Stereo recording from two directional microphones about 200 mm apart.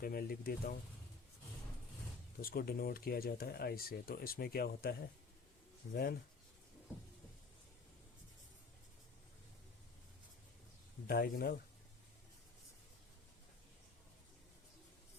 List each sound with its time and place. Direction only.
0.0 s speech: 50° left (ahead or behind)
2.4 s speech: 45° left (ahead or behind)
11.0 s speech: 50° left (ahead or behind)